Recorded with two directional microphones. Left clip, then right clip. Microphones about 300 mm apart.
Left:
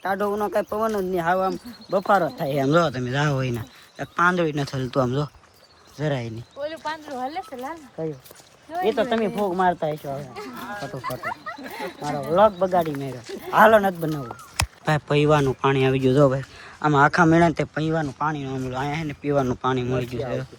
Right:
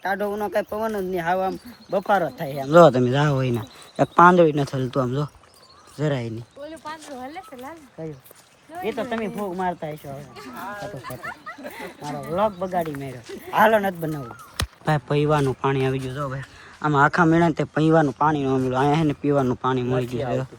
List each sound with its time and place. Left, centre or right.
0.0 s speech: centre
2.6 s speech: centre
6.6 s speech: left
8.8 s speech: centre
16.0 s speech: centre
16.8 s speech: centre